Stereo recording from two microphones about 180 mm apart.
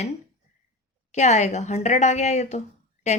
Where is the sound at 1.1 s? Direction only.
40° left (ahead or behind).